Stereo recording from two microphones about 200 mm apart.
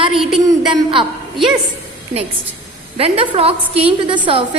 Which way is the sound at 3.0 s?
30° right (ahead or behind).